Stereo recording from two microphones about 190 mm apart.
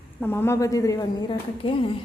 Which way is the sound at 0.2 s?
10° left (ahead or behind).